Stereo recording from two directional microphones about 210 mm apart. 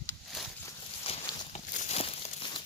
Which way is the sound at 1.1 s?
25° left (ahead or behind).